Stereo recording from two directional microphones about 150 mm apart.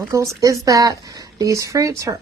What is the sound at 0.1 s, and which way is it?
A woman's voice, 20° right (ahead or behind).